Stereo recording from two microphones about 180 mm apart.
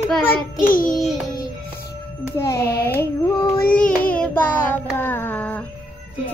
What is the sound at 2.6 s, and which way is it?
Child singing, 60° left (ahead or behind).